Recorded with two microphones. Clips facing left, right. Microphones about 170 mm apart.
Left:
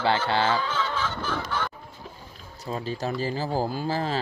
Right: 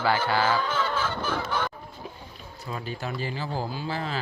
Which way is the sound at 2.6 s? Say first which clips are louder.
Left 4 dB; 35° left (ahead or behind).